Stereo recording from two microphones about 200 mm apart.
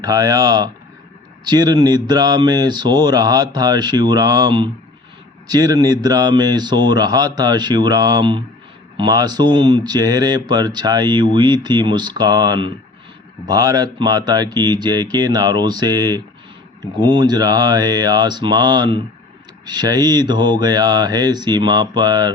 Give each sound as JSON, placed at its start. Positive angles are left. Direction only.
{"t": 0.0, "sound": "speech", "side_deg": -20}